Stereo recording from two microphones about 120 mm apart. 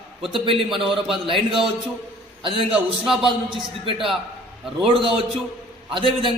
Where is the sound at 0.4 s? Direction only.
50° right (ahead or behind).